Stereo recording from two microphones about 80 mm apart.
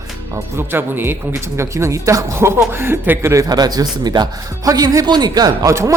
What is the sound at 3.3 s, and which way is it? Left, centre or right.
Speech, right.